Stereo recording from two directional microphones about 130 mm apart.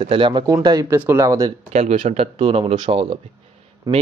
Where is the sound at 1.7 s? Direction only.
60° right (ahead or behind).